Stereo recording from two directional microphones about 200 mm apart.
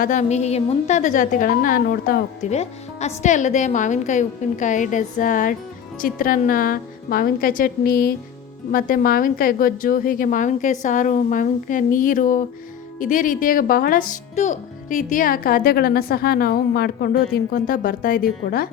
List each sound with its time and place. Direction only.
0.0 s a woman's voice: 40° left (ahead or behind)
2.5 s a woman's voice: 35° left (ahead or behind)